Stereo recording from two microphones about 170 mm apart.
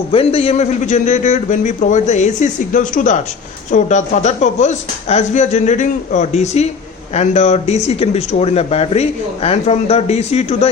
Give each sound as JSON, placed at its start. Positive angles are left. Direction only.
{"t": 0.1, "sound": "a man's voice", "side_deg": 35}